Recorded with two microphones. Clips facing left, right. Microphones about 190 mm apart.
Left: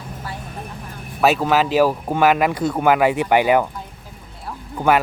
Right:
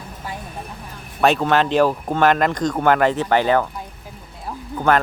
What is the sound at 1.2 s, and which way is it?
Speech, 5° left (ahead or behind).